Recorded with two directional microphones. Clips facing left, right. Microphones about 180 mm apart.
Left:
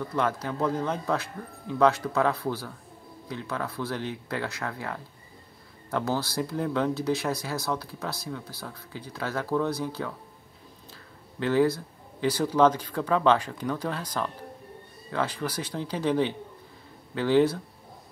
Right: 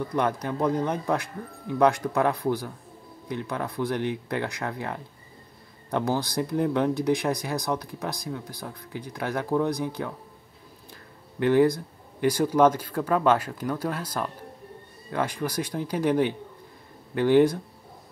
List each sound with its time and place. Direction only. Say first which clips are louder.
0.1 s speech: right 1 dB; 15° right (ahead or behind)
11.3 s speech: right 3 dB; 15° right (ahead or behind)